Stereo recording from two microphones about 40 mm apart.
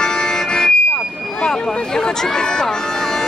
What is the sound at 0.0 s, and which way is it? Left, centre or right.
Music, centre.